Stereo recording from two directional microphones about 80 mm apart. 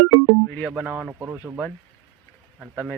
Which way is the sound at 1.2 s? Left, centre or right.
Right.